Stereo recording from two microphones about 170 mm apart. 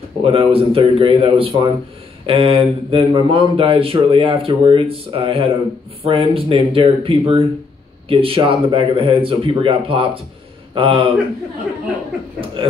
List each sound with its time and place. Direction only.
0.2 s a man's voice: 30° right (ahead or behind)
12.6 s a man's voice: 30° right (ahead or behind)